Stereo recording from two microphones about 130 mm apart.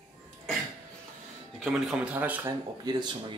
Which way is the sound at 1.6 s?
5° right (ahead or behind).